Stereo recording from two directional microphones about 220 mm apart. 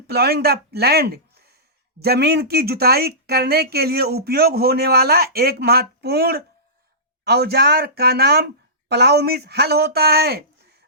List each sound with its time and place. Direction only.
0.1 s speech: 45° right (ahead or behind)